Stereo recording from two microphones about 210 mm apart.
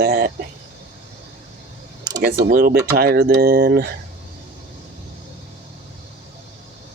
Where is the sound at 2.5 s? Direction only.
45° right (ahead or behind).